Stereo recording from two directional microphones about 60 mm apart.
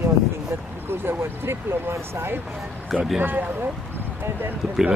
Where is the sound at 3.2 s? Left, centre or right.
Right.